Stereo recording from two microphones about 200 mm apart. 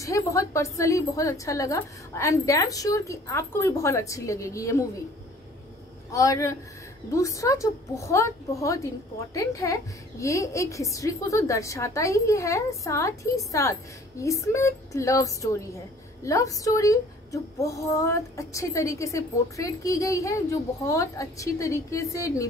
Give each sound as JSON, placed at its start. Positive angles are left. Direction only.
{"t": 0.0, "sound": "a woman's voice", "side_deg": 15}
{"t": 6.1, "sound": "a woman's voice", "side_deg": 15}